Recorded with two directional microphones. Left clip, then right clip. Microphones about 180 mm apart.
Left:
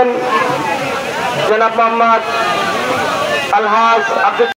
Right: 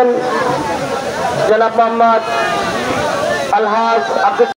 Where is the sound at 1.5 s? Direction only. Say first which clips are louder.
Even; 60° right (ahead or behind).